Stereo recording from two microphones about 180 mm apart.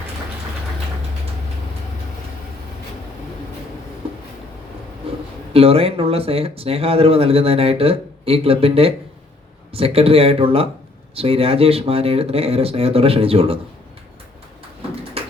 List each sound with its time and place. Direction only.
5.1 s a sound: 30° right (ahead or behind)
5.5 s speech: 30° right (ahead or behind)
15.2 s music: 35° right (ahead or behind)